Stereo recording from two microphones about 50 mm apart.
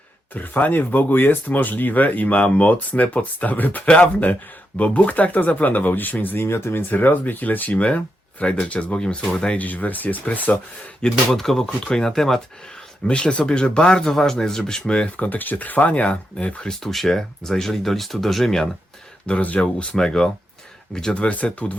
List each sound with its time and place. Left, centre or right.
0.3 s speech: left
6.4 s speech: left
6.9 s speech: left; by 9.6 s centre
9.6 s speech: left
11.3 s speech: centre
13.1 s speech: left
16.6 s speech: centre
19.4 s speech: left; by 21.2 s centre
21.2 s speech: left